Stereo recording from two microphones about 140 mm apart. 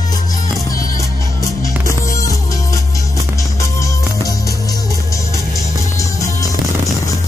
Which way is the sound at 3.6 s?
20° left (ahead or behind).